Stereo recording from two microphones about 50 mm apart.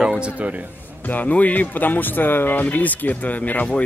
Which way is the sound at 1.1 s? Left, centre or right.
Left.